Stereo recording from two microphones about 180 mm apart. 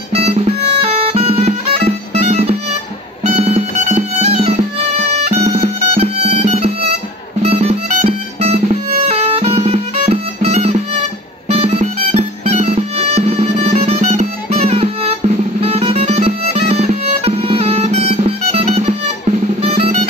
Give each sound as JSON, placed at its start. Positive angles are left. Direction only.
{"t": 0.1, "sound": "music", "side_deg": -35}